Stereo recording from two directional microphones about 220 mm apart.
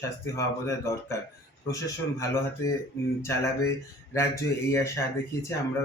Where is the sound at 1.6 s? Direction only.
15° left (ahead or behind).